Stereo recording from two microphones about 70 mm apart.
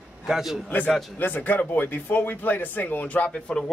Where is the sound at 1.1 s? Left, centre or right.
Left.